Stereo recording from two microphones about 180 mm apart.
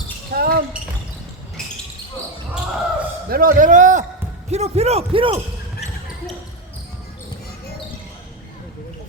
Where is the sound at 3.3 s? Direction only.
50° right (ahead or behind); by 5.4 s 30° right (ahead or behind).